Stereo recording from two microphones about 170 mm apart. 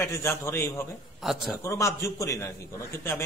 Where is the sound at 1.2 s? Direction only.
Centre (ahead or behind).